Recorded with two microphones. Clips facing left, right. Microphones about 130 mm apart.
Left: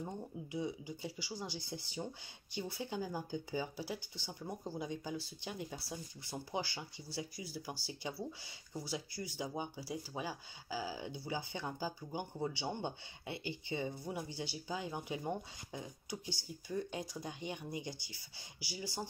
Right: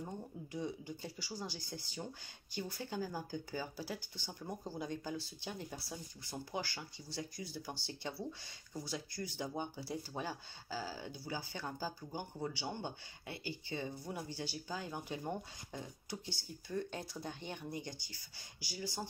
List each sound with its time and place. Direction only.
0.0 s speech: 10° left (ahead or behind)
6.5 s speech: 15° left (ahead or behind)